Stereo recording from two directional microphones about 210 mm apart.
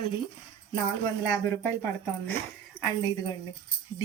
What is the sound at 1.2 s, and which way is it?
Speech, 10° left (ahead or behind).